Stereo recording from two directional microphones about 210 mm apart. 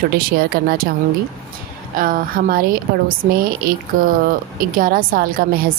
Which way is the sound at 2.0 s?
45° right (ahead or behind).